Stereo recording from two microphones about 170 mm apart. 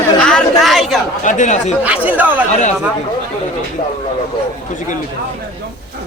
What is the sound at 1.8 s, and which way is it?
Speech, 10° right (ahead or behind).